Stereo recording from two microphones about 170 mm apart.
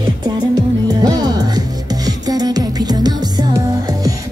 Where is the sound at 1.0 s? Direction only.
25° right (ahead or behind).